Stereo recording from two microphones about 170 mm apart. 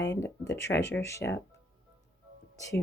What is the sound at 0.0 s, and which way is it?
Speech, 20° left (ahead or behind).